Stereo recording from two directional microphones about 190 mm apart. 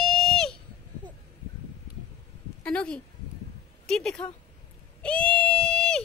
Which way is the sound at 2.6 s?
5° left (ahead or behind).